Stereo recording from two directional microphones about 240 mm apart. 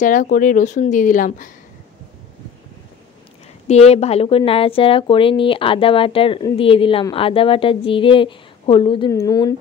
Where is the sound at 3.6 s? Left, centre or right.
Left.